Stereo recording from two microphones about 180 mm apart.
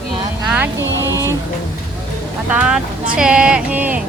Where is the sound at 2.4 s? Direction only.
5° right (ahead or behind).